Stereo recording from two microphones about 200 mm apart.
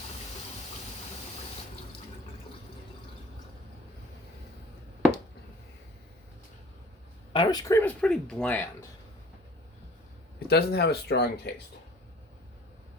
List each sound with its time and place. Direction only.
7.3 s speech: 15° left (ahead or behind)
10.5 s speech: 50° left (ahead or behind)